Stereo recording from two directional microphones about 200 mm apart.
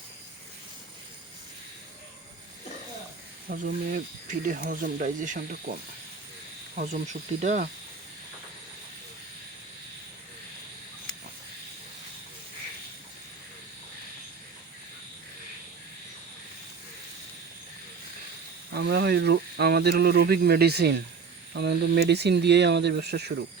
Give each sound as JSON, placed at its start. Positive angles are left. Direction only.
{"t": 3.5, "sound": "speech", "side_deg": -50}
{"t": 6.7, "sound": "insect", "side_deg": -35}
{"t": 18.7, "sound": "speech", "side_deg": -55}